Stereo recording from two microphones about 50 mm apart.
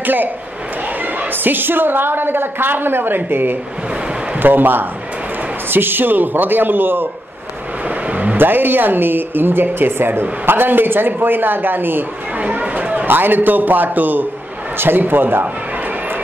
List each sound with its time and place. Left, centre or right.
0.0 s a man's voice: right
1.3 s a woman's voice: right
7.9 s vehicle: right
8.4 s a woman's voice: right
12.4 s chatter: right
13.0 s a man's voice: right